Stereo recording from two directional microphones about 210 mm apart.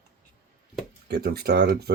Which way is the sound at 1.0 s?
50° right (ahead or behind).